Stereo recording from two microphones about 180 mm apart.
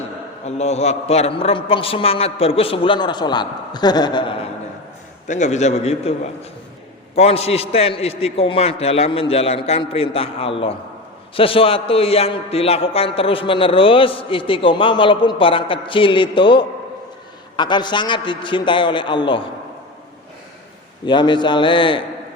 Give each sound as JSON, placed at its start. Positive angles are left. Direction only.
{"t": 0.4, "sound": "a man's voice", "side_deg": 35}
{"t": 5.3, "sound": "a man's voice", "side_deg": 40}
{"t": 7.2, "sound": "a man's voice", "side_deg": 35}
{"t": 21.1, "sound": "a man's voice", "side_deg": 25}